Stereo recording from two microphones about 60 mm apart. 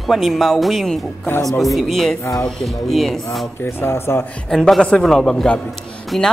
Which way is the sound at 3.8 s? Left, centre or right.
Left.